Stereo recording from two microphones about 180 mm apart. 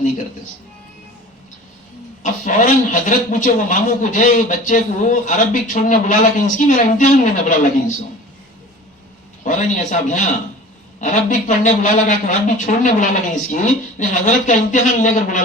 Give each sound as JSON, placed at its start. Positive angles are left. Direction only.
{"t": 2.2, "sound": "a man's voice", "side_deg": 45}
{"t": 9.4, "sound": "a man's voice", "side_deg": 45}